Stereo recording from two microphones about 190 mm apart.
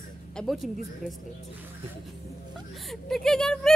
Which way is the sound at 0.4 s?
Centre (ahead or behind).